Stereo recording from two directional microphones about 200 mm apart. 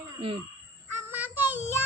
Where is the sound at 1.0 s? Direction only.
10° right (ahead or behind).